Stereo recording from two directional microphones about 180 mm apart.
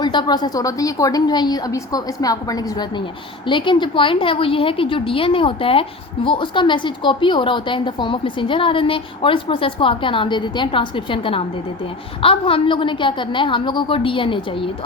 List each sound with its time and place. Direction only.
0.0 s a woman's voice: 25° left (ahead or behind)